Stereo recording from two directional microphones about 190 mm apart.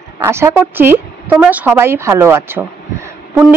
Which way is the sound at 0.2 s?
15° right (ahead or behind).